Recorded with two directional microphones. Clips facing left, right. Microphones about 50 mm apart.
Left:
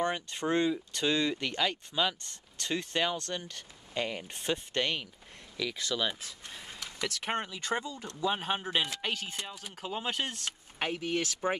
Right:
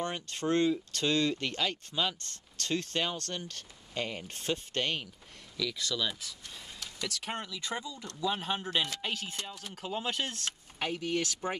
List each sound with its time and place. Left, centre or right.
0.1 s speech: centre
2.1 s speech: centre